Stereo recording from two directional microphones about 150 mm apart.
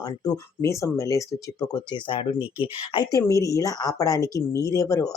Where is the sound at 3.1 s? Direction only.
20° left (ahead or behind).